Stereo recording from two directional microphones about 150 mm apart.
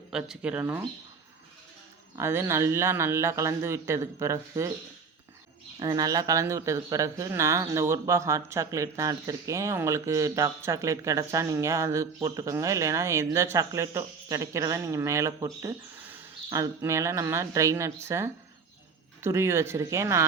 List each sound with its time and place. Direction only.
0.1 s speech: 5° right (ahead or behind)
0.6 s speech: 20° right (ahead or behind)
2.1 s speech: 15° right (ahead or behind)
5.8 s speech: 25° right (ahead or behind)
16.0 s bird: 10° right (ahead or behind)
16.5 s speech: 20° right (ahead or behind)